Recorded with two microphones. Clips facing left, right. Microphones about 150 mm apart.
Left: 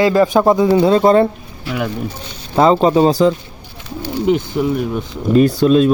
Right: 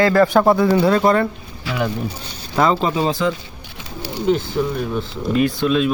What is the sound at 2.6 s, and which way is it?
Speech, 30° left (ahead or behind).